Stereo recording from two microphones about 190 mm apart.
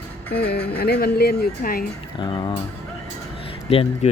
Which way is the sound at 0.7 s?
55° left (ahead or behind).